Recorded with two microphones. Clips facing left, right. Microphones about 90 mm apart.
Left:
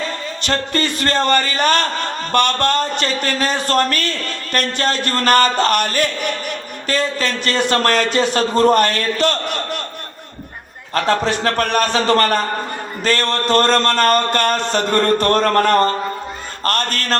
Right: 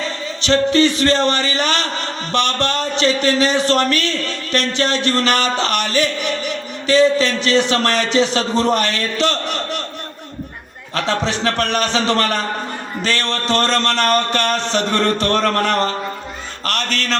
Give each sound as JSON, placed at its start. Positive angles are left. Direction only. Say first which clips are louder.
{"t": 0.4, "sound": "a man's voice", "louder": "right 7 dB", "side_deg": 50}
{"t": 10.9, "sound": "a man's voice", "louder": "left 3 dB", "side_deg": 50}